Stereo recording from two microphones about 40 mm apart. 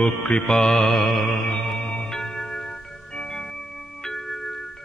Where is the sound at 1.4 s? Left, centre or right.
Left.